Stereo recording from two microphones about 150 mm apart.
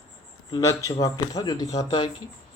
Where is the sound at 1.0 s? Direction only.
25° left (ahead or behind).